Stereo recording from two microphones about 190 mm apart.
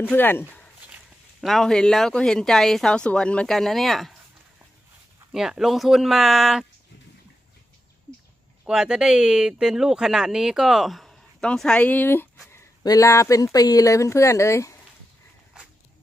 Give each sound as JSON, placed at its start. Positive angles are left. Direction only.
{"t": 0.0, "sound": "speech", "side_deg": 10}
{"t": 5.3, "sound": "speech", "side_deg": 0}
{"t": 8.6, "sound": "speech", "side_deg": -5}